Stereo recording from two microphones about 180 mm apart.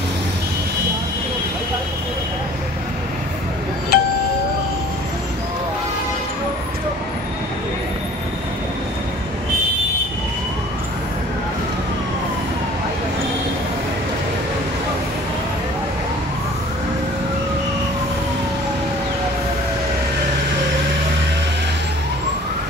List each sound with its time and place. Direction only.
3.9 s music: 60° left (ahead or behind)